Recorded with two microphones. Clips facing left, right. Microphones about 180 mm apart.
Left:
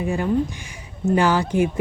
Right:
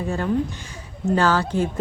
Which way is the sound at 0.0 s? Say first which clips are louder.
Left 2 dB; 10° left (ahead or behind).